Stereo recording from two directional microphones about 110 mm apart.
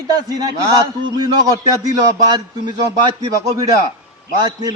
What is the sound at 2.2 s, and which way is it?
Speech, 40° right (ahead or behind).